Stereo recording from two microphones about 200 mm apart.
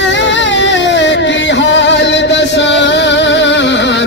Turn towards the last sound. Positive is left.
turn(degrees=60)  # may be behind; listen again after turning